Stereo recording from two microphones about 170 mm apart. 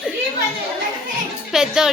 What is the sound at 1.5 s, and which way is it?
Speech, 5° right (ahead or behind).